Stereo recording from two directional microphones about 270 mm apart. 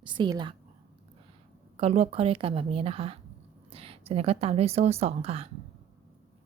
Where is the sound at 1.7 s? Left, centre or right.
Right.